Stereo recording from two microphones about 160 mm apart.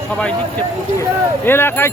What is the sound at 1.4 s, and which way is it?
Speech, 15° left (ahead or behind).